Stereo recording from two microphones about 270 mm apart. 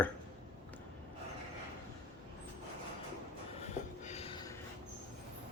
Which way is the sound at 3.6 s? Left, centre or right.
Left.